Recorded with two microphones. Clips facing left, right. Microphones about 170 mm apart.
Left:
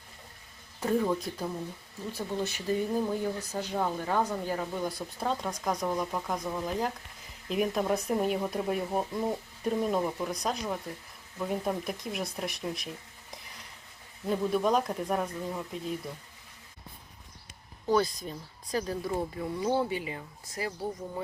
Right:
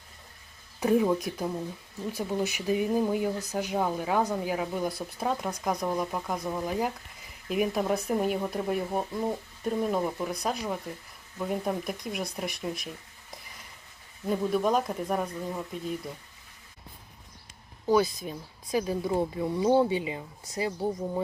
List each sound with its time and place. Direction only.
0.8 s speech: 10° right (ahead or behind)
14.3 s speech: 5° right (ahead or behind)
17.8 s speech: 5° right (ahead or behind)